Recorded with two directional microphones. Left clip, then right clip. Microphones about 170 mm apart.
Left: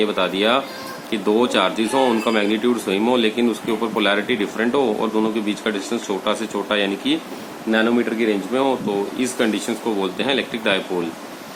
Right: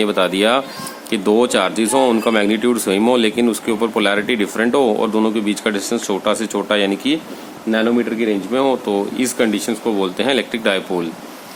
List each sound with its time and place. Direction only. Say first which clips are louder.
0.0 s speech: right 3 dB; 60° right (ahead or behind)
7.7 s speech: right 1 dB; 35° right (ahead or behind)
8.5 s speech: right 6 dB; 50° right (ahead or behind)